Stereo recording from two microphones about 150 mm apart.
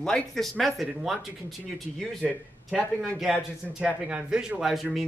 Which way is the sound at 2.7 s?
10° left (ahead or behind).